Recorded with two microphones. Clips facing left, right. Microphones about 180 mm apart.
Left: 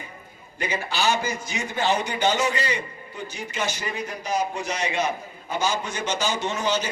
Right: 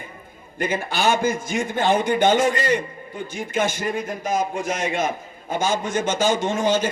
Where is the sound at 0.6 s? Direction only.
50° right (ahead or behind).